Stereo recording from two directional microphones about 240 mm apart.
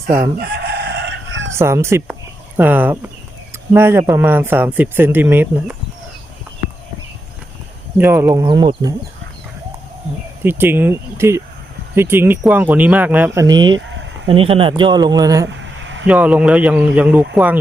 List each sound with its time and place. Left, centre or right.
0.3 s chicken: right
1.5 s speech: centre
7.9 s a man's voice: centre
10.4 s a man's voice: centre
15.5 s a sound: right
16.0 s speech: centre